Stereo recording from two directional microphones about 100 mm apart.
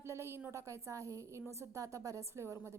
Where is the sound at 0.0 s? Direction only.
25° right (ahead or behind).